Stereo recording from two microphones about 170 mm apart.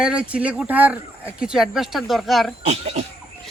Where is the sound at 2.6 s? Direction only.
40° right (ahead or behind).